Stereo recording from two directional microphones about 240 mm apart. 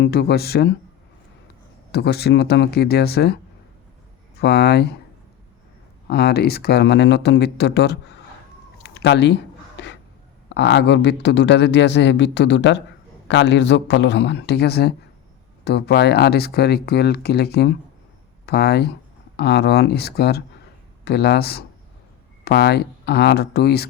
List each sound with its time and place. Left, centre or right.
0.0 s speech: left
1.9 s speech: left
4.4 s speech: left
6.1 s speech: left
8.8 s a sound: left
10.5 s speech: left